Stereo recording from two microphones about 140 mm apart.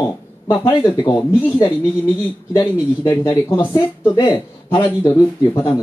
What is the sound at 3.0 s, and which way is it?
A man's voice, 25° left (ahead or behind).